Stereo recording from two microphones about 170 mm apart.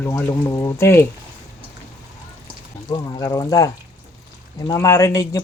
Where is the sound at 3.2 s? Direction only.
20° left (ahead or behind).